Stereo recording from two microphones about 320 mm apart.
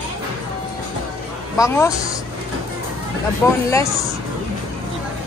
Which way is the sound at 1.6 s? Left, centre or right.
Centre.